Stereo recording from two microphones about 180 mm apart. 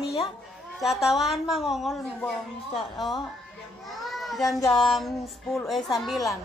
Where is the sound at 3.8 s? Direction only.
Centre (ahead or behind).